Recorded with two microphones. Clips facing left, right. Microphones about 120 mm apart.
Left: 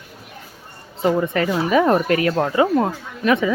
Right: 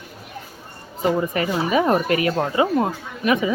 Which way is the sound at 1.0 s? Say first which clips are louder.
Left 2 dB; 10° right (ahead or behind).